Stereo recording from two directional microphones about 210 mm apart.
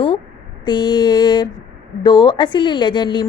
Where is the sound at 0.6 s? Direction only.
20° left (ahead or behind).